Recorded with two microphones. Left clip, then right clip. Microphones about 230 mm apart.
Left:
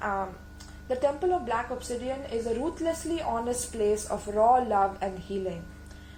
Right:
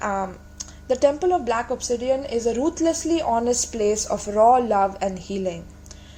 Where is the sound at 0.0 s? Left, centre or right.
Right.